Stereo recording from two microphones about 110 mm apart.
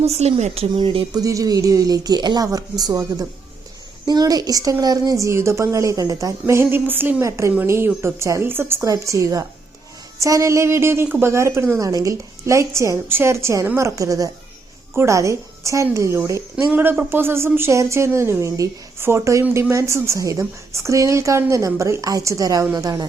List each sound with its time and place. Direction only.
0.0 s speech: 75° right (ahead or behind)
0.8 s speech: 45° right (ahead or behind)
1.2 s a woman's voice: 30° right (ahead or behind)
6.4 s a woman's voice: 20° right (ahead or behind)
16.7 s a woman's voice: 15° right (ahead or behind); by 23.0 s 35° right (ahead or behind)